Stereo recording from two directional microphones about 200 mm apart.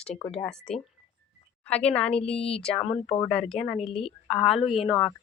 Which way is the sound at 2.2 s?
30° left (ahead or behind).